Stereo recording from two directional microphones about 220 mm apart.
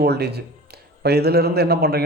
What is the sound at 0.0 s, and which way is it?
Speech, 50° right (ahead or behind).